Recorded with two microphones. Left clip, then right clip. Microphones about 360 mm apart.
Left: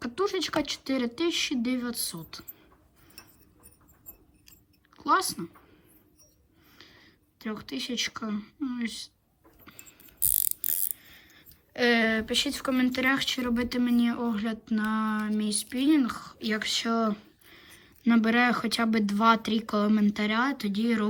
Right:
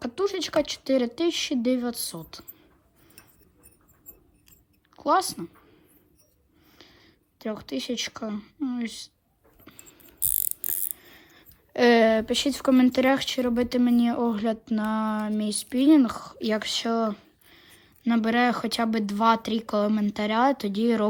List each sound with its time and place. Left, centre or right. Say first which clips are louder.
0.0 s speech: right 1 dB; centre
4.9 s a woman's voice: right 2 dB; centre
6.7 s speech: even; centre
9.6 s a sound: right 1 dB; centre
10.2 s mechanisms: even; centre
10.8 s speech: right 1 dB; centre